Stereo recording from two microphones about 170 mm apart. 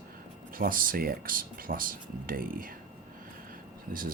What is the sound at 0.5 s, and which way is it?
Speech, 55° right (ahead or behind).